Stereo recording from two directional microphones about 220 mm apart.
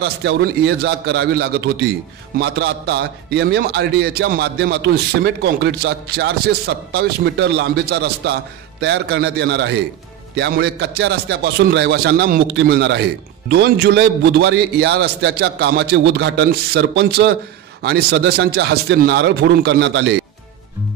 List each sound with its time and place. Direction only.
0.0 s a man's voice: 50° right (ahead or behind)